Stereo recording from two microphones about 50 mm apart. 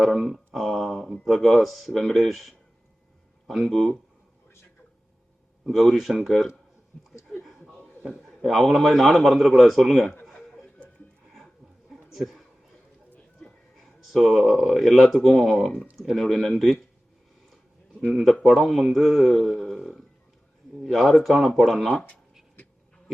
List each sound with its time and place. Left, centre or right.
0.0 s speech: centre
5.7 s speech: centre
7.4 s chuckle: centre
8.7 s speech: centre
10.2 s a sound: centre
13.4 s music: left
13.7 s speech: centre
18.1 s speech: centre